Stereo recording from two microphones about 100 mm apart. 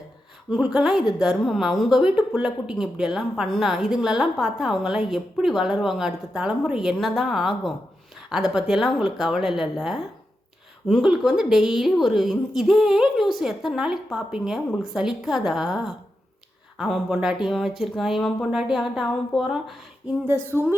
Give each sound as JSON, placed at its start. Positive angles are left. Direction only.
{"t": 0.5, "sound": "a woman's voice", "side_deg": -10}
{"t": 20.2, "sound": "speech", "side_deg": -25}